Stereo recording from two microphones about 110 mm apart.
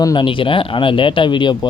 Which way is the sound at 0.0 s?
45° left (ahead or behind).